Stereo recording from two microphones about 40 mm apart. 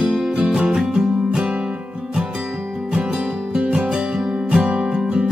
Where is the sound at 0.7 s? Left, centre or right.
Centre.